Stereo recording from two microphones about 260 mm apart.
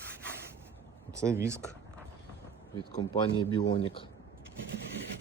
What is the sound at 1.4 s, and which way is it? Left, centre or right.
Speech, centre.